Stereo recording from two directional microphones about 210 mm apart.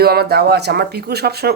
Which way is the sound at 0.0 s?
50° right (ahead or behind).